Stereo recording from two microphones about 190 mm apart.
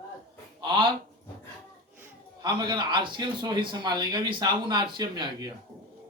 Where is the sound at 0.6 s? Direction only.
25° right (ahead or behind).